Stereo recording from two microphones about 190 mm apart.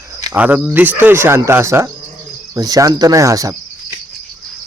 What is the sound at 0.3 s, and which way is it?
Speech, 10° right (ahead or behind).